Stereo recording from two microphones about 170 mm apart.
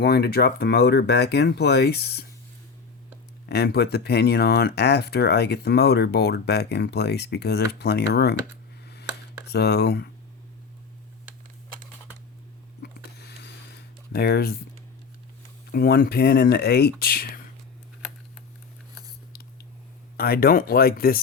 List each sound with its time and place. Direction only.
0.0 s speech: 70° left (ahead or behind)
3.4 s speech: 70° left (ahead or behind)
9.5 s speech: 75° left (ahead or behind)
12.8 s a sound: 75° left (ahead or behind)
14.1 s speech: 65° left (ahead or behind)
15.7 s speech: 60° left (ahead or behind)
20.1 s speech: 60° left (ahead or behind)